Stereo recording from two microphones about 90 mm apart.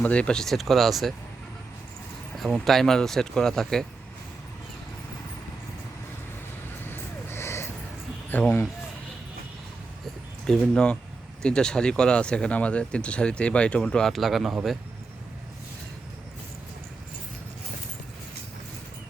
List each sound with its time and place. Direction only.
0.0 s speech: 15° left (ahead or behind)
2.3 s speech: centre (ahead or behind)
6.8 s vehicle: 25° left (ahead or behind)
8.3 s speech: 20° left (ahead or behind)
10.4 s speech: 5° left (ahead or behind)